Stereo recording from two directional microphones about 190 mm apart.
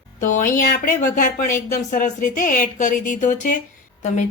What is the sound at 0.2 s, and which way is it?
Speech, 40° left (ahead or behind).